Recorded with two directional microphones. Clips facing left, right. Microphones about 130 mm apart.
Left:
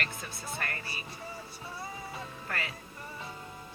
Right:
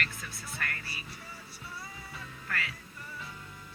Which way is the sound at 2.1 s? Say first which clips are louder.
Left 1 dB; 30° left (ahead or behind).